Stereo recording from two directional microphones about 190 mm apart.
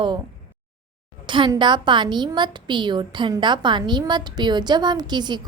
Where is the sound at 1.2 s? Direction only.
25° right (ahead or behind).